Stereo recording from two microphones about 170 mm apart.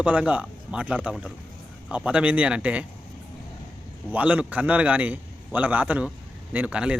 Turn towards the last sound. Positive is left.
turn(degrees=-5)  # may be behind; listen again after turning